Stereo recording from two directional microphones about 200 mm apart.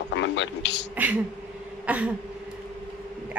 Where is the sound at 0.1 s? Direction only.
65° left (ahead or behind).